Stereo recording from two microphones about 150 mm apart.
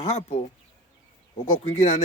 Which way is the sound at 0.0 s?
50° left (ahead or behind).